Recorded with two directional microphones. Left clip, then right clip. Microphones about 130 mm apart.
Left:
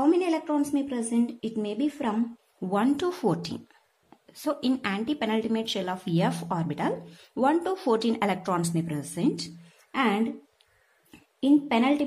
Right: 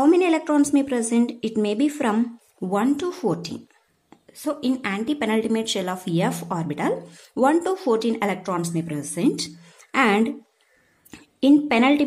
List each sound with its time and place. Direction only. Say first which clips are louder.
0.0 s a woman's voice: right 6 dB; 25° right (ahead or behind)
3.0 s speech: right 2 dB; 5° right (ahead or behind)
9.0 s a woman's voice: right 8 dB; 20° right (ahead or behind)